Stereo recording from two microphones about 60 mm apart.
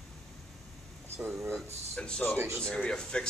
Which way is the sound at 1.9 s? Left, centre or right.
Centre.